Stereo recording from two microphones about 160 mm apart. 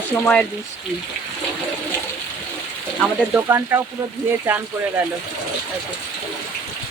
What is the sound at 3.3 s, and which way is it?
Speech, 15° right (ahead or behind).